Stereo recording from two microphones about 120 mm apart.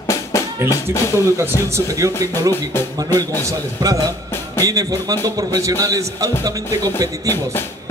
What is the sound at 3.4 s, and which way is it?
A man's voice, 30° right (ahead or behind).